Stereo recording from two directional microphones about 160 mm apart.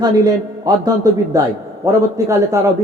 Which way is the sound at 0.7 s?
25° right (ahead or behind).